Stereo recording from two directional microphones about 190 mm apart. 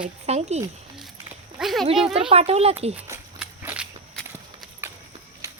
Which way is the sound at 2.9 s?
15° right (ahead or behind).